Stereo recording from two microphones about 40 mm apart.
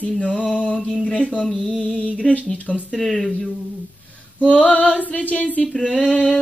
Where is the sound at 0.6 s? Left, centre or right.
Left.